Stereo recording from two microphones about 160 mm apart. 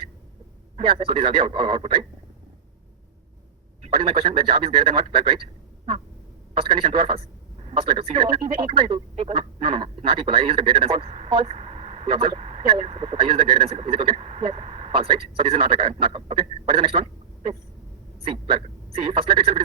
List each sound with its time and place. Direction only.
0.8 s speech: 35° right (ahead or behind)
3.8 s speech: 35° right (ahead or behind)
6.5 s speech: 35° right (ahead or behind)